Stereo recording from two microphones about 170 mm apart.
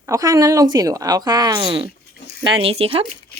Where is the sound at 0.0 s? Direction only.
20° right (ahead or behind).